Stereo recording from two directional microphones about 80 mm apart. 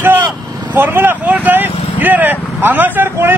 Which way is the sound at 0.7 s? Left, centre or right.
Right.